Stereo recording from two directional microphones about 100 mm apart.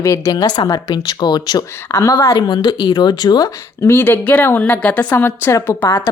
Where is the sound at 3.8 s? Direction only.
25° left (ahead or behind).